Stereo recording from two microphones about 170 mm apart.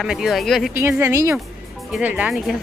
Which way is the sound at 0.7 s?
15° right (ahead or behind).